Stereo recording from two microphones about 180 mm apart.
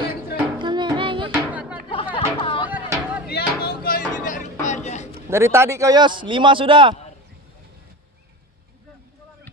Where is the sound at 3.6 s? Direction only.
55° left (ahead or behind); by 5.0 s 40° left (ahead or behind).